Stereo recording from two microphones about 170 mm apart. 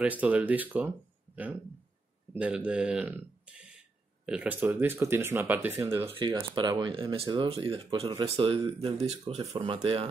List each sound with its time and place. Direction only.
0.0 s speech: 10° right (ahead or behind)
6.0 s speech: 30° right (ahead or behind)